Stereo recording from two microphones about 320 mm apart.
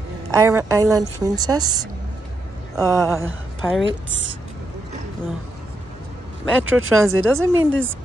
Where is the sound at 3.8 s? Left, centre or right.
Right.